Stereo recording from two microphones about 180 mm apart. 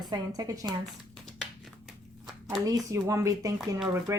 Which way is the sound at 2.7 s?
15° right (ahead or behind).